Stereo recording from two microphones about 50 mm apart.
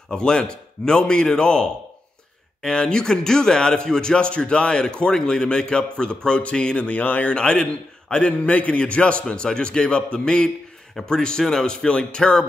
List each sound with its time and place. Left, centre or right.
0.1 s speech: centre
7.3 s a man's voice: centre